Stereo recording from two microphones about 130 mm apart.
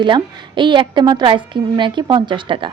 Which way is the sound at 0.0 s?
35° right (ahead or behind).